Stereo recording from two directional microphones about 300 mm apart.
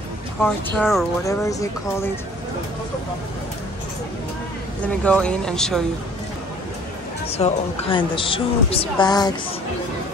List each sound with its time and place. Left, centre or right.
0.4 s speech: centre
1.2 s speech: centre
4.8 s speech: centre
7.2 s speech: centre